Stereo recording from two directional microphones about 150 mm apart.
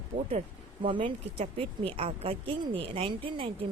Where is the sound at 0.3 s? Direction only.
40° right (ahead or behind).